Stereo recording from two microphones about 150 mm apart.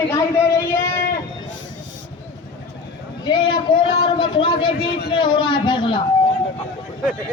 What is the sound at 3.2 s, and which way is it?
A man's voice, 30° left (ahead or behind).